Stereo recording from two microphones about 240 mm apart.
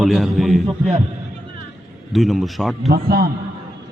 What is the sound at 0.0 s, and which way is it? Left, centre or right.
Speech, centre.